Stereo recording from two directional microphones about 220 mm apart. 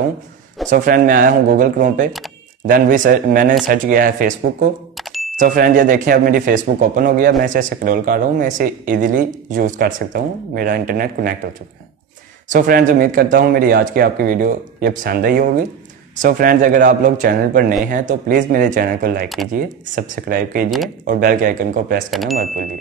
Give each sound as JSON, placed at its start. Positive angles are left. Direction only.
{"t": 0.7, "sound": "speech", "side_deg": -40}
{"t": 4.9, "sound": "a sound", "side_deg": 0}
{"t": 5.3, "sound": "speech", "side_deg": -40}
{"t": 12.4, "sound": "speech", "side_deg": -40}
{"t": 19.2, "sound": "speech", "side_deg": 0}
{"t": 19.5, "sound": "speech", "side_deg": -40}
{"t": 22.1, "sound": "speech", "side_deg": 0}